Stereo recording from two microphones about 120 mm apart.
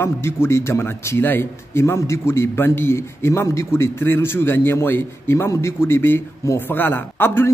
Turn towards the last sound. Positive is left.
turn(degrees=20)  # may be behind; listen again after turning